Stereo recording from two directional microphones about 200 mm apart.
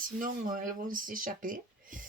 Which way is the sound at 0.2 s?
45° right (ahead or behind).